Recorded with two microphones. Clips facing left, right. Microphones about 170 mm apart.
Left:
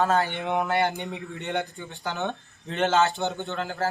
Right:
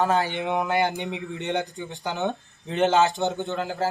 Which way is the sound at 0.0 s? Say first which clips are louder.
Right 1 dB; 15° right (ahead or behind).